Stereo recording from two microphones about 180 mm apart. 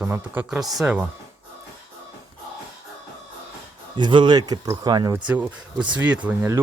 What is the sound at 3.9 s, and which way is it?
Speech, 25° right (ahead or behind).